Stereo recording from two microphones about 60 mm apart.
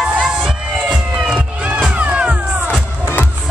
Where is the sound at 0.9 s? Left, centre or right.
Centre.